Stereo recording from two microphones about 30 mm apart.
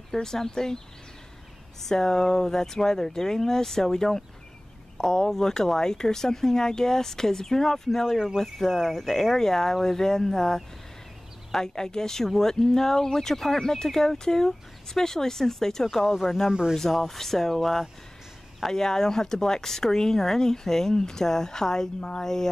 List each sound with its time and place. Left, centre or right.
0.1 s speech: centre
1.9 s speech: centre
18.7 s speech: centre